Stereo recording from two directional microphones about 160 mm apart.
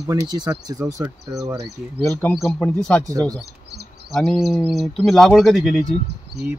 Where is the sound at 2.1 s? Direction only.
10° left (ahead or behind).